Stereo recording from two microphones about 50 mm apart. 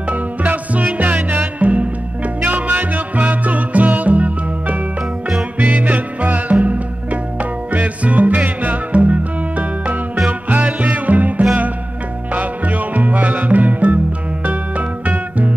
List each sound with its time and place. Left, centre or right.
0.1 s music: right